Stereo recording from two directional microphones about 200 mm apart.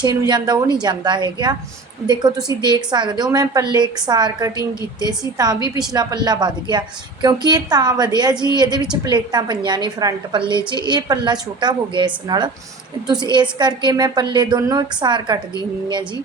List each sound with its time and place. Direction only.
0.0 s a woman's voice: 20° right (ahead or behind)